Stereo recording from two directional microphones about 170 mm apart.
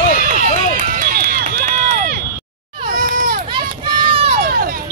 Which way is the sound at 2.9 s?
55° right (ahead or behind).